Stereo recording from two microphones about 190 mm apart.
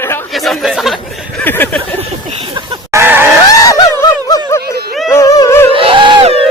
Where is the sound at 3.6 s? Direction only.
15° left (ahead or behind).